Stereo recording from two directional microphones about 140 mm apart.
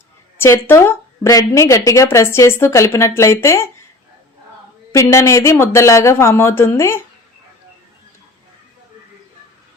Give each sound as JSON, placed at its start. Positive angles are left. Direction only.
{"t": 0.3, "sound": "a woman's voice", "side_deg": 15}
{"t": 4.9, "sound": "a woman's voice", "side_deg": 20}